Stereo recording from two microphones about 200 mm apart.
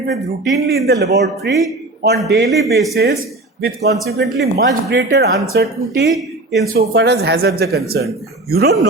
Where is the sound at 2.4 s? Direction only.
Centre (ahead or behind).